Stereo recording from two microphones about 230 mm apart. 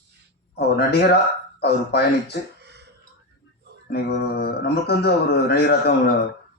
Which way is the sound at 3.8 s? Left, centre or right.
Left.